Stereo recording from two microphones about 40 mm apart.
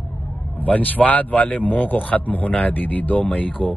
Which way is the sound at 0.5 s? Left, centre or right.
Left.